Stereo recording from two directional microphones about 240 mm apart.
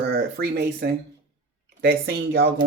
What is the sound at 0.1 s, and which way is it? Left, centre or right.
Speech, right.